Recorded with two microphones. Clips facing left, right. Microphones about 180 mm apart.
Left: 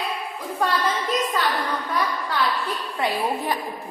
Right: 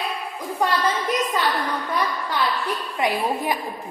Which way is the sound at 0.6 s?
20° right (ahead or behind).